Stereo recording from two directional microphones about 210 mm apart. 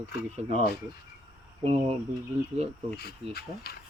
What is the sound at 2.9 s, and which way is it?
Speech, 50° left (ahead or behind).